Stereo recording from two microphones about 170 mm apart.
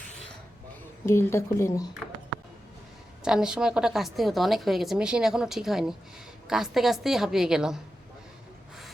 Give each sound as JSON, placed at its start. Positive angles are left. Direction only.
{"t": 1.0, "sound": "a woman's voice", "side_deg": 15}
{"t": 3.2, "sound": "a woman's voice", "side_deg": -5}